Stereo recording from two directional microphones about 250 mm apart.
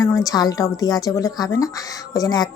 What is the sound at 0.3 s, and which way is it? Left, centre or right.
Speech, centre.